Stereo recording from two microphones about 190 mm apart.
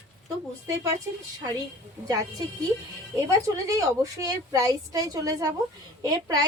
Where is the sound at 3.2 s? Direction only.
15° right (ahead or behind).